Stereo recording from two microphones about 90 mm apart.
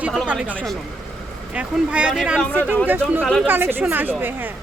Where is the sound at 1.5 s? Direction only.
10° right (ahead or behind).